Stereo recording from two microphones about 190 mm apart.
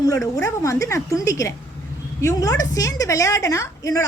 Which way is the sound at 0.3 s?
15° left (ahead or behind).